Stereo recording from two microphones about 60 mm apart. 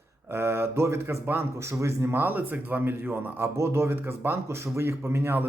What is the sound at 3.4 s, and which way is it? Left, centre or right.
Speech, right.